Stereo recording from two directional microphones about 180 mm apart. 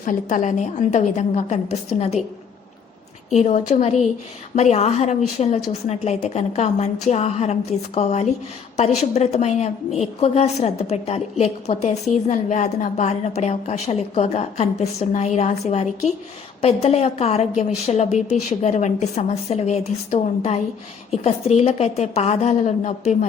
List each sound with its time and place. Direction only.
0.0 s a woman's voice: 45° left (ahead or behind)
3.3 s a woman's voice: 40° left (ahead or behind)